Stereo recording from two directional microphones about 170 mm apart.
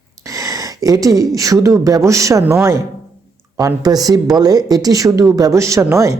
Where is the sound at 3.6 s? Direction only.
20° right (ahead or behind).